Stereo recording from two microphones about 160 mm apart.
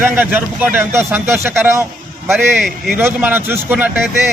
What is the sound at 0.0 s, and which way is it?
Speech, 10° right (ahead or behind).